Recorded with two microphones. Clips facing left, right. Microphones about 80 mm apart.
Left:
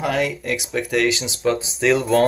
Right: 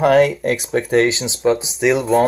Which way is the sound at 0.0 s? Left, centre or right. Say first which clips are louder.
Right 9 dB; right.